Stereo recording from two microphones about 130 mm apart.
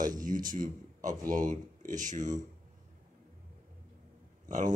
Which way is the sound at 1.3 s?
75° right (ahead or behind).